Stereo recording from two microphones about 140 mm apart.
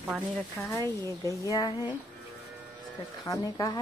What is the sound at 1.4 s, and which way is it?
Speech, 25° left (ahead or behind).